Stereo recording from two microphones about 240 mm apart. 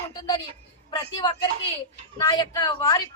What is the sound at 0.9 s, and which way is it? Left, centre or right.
A woman's voice, centre.